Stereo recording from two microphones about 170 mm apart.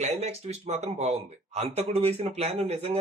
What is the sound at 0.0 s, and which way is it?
Speech, 40° right (ahead or behind).